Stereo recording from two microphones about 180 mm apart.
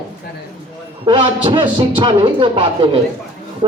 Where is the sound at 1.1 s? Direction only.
25° right (ahead or behind).